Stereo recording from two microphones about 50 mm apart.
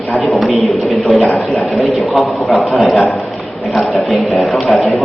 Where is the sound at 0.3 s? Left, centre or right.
Centre.